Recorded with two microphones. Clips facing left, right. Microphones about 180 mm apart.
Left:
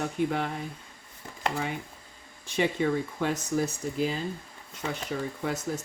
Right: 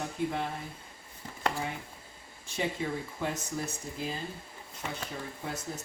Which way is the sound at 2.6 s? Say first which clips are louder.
Left 7 dB; 70° left (ahead or behind).